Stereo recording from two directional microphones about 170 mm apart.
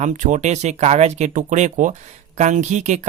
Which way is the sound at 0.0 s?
45° right (ahead or behind).